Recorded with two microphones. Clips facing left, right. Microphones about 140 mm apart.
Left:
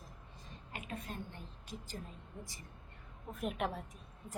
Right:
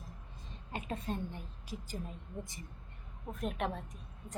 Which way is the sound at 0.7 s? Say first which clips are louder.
Right 6 dB; 30° right (ahead or behind).